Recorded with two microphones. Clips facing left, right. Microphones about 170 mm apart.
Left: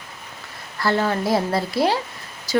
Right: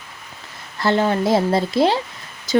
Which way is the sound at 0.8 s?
20° right (ahead or behind).